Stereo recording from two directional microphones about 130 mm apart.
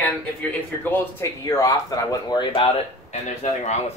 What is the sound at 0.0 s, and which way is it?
Speech, 10° left (ahead or behind).